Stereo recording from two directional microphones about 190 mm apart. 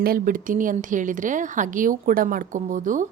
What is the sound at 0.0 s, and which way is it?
A woman's voice, 50° right (ahead or behind).